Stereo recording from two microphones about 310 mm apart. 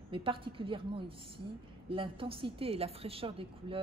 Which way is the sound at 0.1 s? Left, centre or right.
Centre.